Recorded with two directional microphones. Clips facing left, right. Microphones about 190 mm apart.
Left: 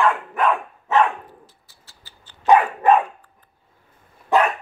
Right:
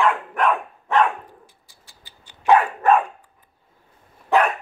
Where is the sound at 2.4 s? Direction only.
15° left (ahead or behind).